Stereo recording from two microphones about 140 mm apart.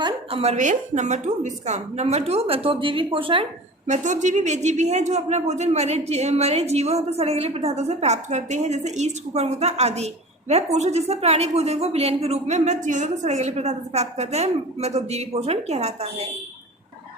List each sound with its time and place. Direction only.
0.0 s a sound: 40° right (ahead or behind)
0.5 s a woman's voice: 60° right (ahead or behind); by 3.4 s 40° right (ahead or behind)
3.8 s a woman's voice: 60° right (ahead or behind)